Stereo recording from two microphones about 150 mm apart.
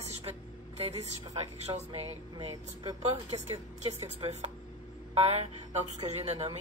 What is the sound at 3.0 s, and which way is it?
A woman's voice, 45° right (ahead or behind).